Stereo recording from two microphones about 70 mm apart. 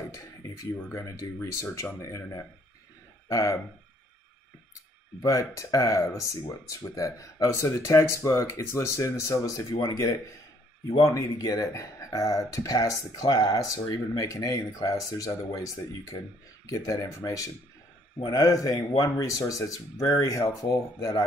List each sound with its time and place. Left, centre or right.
0.9 s speech: left
3.3 s speech: left
5.2 s speech: left